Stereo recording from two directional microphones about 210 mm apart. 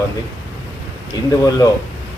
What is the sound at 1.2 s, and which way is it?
Speech, 15° left (ahead or behind).